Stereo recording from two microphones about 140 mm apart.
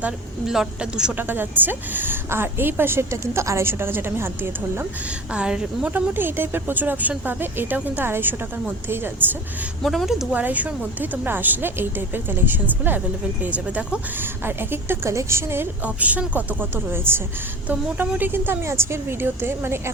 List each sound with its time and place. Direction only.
0.0 s a woman's voice: 5° right (ahead or behind)
9.8 s a woman's voice: centre (ahead or behind); by 19.9 s 15° right (ahead or behind)